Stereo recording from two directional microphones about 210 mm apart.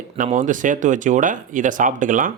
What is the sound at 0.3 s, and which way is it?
Speech, 35° right (ahead or behind).